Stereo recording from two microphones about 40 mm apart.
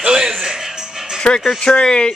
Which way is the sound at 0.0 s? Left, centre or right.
Centre.